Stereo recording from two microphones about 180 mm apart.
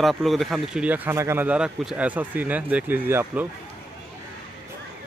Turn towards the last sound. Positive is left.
turn(degrees=-10)  # may be behind; listen again after turning